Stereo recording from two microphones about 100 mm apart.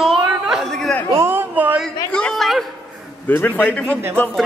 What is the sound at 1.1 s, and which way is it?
Speech, 20° right (ahead or behind).